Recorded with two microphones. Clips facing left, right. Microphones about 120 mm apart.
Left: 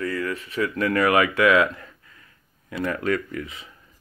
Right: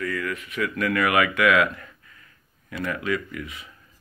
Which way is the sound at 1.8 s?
30° left (ahead or behind).